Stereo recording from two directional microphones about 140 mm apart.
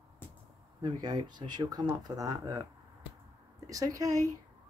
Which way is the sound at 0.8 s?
30° right (ahead or behind).